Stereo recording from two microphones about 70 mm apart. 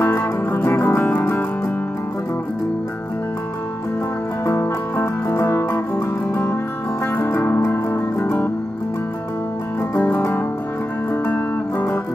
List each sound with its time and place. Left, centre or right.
0.0 s music: left
4.5 s music: left
9.9 s music: left
11.2 s music: left